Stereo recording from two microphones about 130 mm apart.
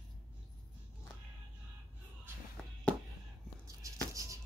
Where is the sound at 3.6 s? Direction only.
25° right (ahead or behind).